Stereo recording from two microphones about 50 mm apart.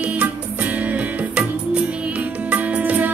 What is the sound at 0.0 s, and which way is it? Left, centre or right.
Music, right.